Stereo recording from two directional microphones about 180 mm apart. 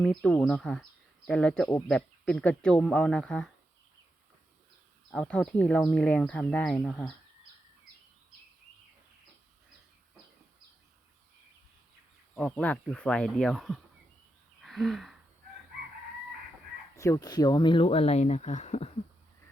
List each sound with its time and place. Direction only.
0.0 s speech: 5° left (ahead or behind)
5.1 s speech: 5° left (ahead or behind)
12.3 s speech: 5° left (ahead or behind)
14.6 s a sound: centre (ahead or behind)
16.9 s speech: 15° left (ahead or behind); by 18.9 s 35° left (ahead or behind)